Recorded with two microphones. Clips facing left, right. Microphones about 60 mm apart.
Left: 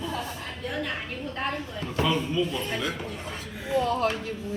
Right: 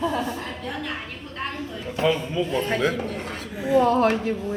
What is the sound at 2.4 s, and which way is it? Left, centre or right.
Speech, right.